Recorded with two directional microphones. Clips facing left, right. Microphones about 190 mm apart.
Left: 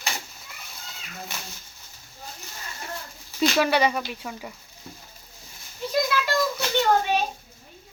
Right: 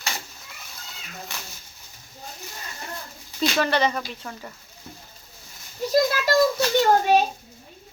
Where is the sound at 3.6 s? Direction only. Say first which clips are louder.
Even; 10° left (ahead or behind).